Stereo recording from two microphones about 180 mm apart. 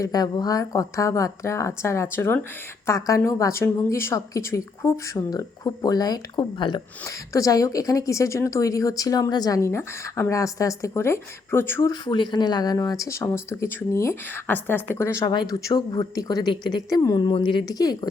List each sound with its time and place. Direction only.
0.0 s speech: 20° left (ahead or behind)